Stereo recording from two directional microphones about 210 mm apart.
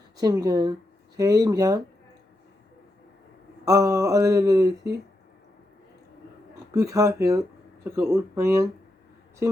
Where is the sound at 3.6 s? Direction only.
15° right (ahead or behind).